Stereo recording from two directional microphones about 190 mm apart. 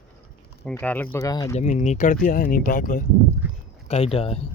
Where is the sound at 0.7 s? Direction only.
10° left (ahead or behind).